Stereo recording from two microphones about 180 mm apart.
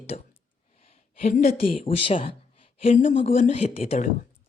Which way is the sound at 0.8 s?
35° left (ahead or behind).